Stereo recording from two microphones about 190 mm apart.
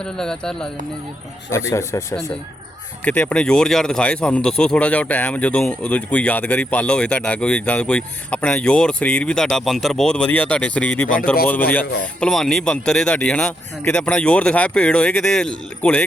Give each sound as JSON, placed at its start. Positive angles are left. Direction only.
{"t": 0.0, "sound": "speech", "side_deg": 5}
{"t": 1.7, "sound": "speech", "side_deg": 15}